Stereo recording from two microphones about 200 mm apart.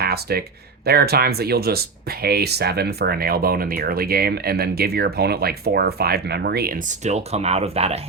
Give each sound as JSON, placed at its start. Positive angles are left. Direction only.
{"t": 0.0, "sound": "speech", "side_deg": -50}
{"t": 7.0, "sound": "speech", "side_deg": -35}